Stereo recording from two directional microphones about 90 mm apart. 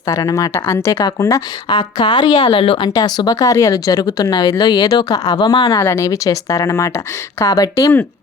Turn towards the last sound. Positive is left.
turn(degrees=35)  # may be behind; listen again after turning